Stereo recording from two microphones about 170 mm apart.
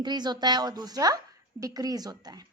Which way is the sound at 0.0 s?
25° right (ahead or behind).